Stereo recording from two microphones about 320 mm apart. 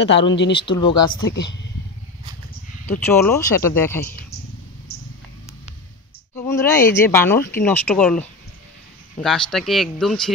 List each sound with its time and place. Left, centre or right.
0.0 s speech: left
0.6 s speech: centre
1.3 s speech: left
2.9 s speech: centre
6.3 s speech: centre